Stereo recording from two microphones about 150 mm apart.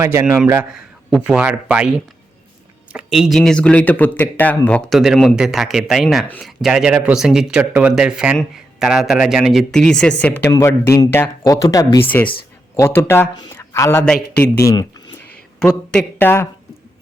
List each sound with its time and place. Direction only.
0.0 s speech: 15° right (ahead or behind)
0.7 s speech: 5° right (ahead or behind)
10.7 s speech: 20° left (ahead or behind)
12.0 s speech: 10° left (ahead or behind)
14.0 s speech: 5° left (ahead or behind)
14.6 s speech: 25° left (ahead or behind)
15.5 s speech: 5° left (ahead or behind)